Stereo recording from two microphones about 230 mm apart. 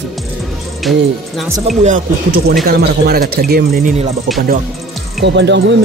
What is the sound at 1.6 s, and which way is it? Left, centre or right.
Speech, right.